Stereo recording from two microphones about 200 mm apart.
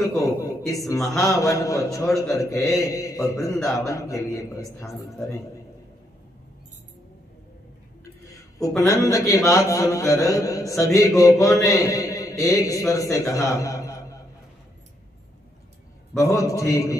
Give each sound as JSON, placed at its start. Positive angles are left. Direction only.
{"t": 0.1, "sound": "a man's voice", "side_deg": 15}
{"t": 8.3, "sound": "a sound", "side_deg": 15}
{"t": 8.8, "sound": "a man's voice", "side_deg": 15}
{"t": 16.2, "sound": "a man's voice", "side_deg": 15}